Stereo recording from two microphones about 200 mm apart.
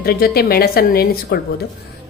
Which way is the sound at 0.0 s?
50° left (ahead or behind).